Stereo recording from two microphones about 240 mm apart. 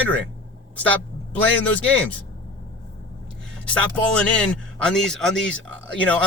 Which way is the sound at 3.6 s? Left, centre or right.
Centre.